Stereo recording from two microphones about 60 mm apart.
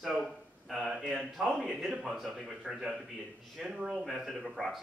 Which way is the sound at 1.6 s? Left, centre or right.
Centre.